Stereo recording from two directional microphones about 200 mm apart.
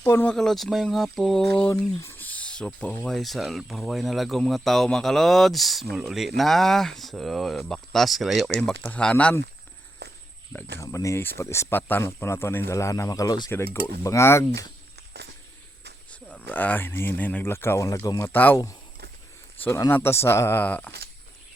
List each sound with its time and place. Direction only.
0.0 s speech: 10° left (ahead or behind)
10.0 s walk: 55° right (ahead or behind)
10.8 s speech: 15° left (ahead or behind)
16.3 s speech: 10° left (ahead or behind)